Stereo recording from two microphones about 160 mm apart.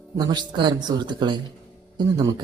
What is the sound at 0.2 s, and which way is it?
Speech, 25° right (ahead or behind).